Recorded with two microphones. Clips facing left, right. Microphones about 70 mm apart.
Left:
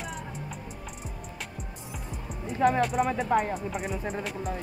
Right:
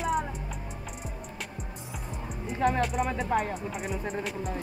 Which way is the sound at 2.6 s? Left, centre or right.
Centre.